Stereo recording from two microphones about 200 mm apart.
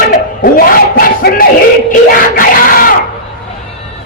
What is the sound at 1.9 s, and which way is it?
Screaming, 45° left (ahead or behind).